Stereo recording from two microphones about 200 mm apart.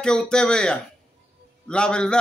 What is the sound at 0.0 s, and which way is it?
A man's voice, 5° left (ahead or behind).